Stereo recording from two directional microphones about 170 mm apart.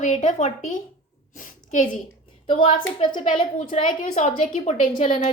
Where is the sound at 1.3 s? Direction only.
50° left (ahead or behind).